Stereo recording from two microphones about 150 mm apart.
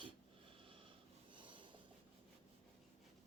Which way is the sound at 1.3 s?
35° right (ahead or behind).